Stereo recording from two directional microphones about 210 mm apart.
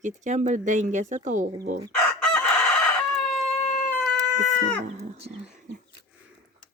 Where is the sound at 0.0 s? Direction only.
35° right (ahead or behind).